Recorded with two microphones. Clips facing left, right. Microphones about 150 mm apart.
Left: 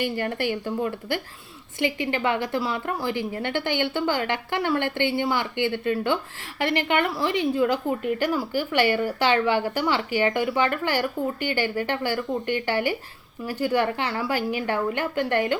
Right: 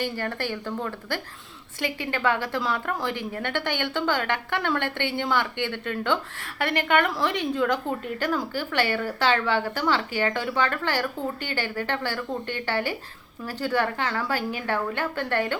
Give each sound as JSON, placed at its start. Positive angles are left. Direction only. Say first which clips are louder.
{"t": 0.0, "sound": "speech", "louder": "left 3 dB", "side_deg": 15}
{"t": 3.1, "sound": "speech", "louder": "left 3 dB", "side_deg": -55}
{"t": 3.4, "sound": "speech", "louder": "left 2 dB", "side_deg": 10}
{"t": 6.4, "sound": "a woman's voice", "louder": "left 2 dB", "side_deg": -50}
{"t": 7.6, "sound": "speech", "louder": "left 2 dB", "side_deg": 10}